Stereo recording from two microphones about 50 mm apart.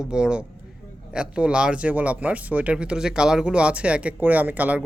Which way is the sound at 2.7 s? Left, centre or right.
Centre.